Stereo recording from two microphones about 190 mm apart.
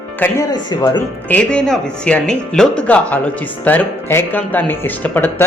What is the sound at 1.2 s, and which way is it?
Speech, 5° left (ahead or behind).